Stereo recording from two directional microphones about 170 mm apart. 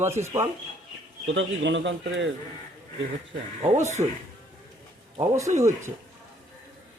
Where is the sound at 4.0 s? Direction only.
30° right (ahead or behind).